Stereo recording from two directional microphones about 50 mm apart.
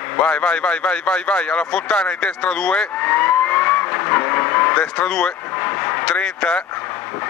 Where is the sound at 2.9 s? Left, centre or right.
Left.